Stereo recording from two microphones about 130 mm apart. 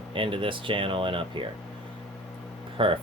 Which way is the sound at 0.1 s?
40° right (ahead or behind).